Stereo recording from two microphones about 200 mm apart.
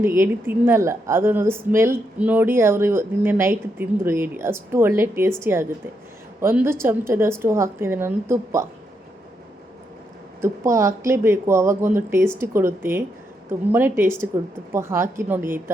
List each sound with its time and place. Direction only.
0.0 s speech: 10° right (ahead or behind)
10.4 s speech: 15° right (ahead or behind)